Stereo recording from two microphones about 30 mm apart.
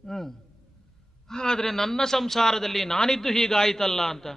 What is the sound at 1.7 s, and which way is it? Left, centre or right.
A man's voice, centre.